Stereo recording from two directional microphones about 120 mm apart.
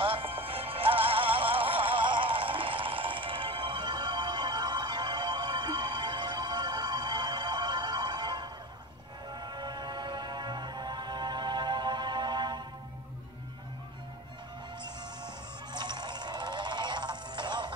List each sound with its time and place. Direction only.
0.0 s music: 45° right (ahead or behind)
14.8 s music: 35° right (ahead or behind)